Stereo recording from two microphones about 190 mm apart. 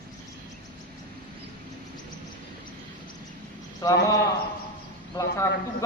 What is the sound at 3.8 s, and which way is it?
Speech, 20° left (ahead or behind).